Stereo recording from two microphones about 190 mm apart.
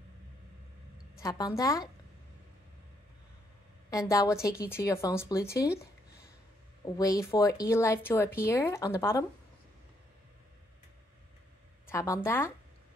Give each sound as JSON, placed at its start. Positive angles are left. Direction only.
{"t": 1.2, "sound": "speech", "side_deg": 20}
{"t": 3.9, "sound": "speech", "side_deg": 20}
{"t": 11.9, "sound": "speech", "side_deg": 15}